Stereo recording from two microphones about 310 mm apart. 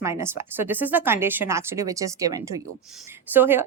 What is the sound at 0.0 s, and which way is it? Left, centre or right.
Speech, centre.